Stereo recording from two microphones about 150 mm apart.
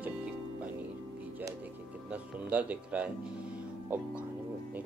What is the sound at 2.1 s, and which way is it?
Speech, 10° right (ahead or behind).